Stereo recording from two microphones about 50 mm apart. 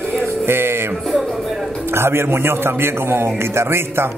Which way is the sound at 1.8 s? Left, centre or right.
Right.